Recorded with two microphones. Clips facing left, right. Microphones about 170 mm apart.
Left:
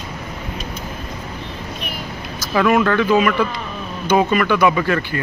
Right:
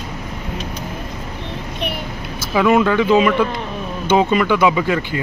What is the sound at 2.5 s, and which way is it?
Speech, 10° right (ahead or behind).